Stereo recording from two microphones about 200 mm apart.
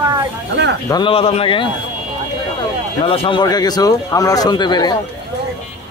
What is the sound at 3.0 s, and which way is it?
Speech, 25° left (ahead or behind).